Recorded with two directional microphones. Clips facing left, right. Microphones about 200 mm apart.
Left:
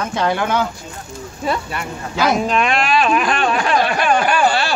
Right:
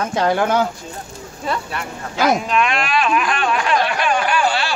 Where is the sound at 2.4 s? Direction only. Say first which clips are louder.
Left 2 dB; 35° left (ahead or behind).